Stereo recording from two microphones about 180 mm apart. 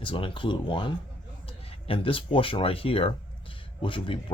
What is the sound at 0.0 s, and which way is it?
Speech, 30° left (ahead or behind).